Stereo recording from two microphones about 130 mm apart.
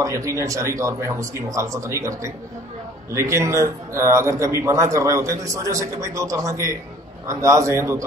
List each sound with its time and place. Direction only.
0.0 s speech: 25° right (ahead or behind)